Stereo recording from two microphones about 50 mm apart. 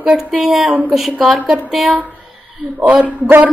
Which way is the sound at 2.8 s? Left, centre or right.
Right.